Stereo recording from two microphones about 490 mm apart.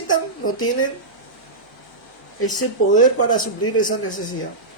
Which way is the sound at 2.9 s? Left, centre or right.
Centre.